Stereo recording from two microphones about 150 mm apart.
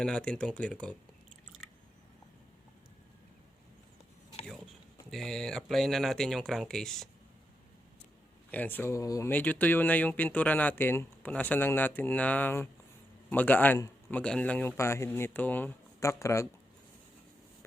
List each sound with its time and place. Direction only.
0.0 s speech: 5° left (ahead or behind)
5.1 s speech: 5° left (ahead or behind)
8.4 s speech: 10° left (ahead or behind)